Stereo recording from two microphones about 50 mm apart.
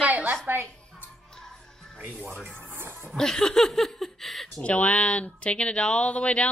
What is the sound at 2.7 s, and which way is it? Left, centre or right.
Music, right.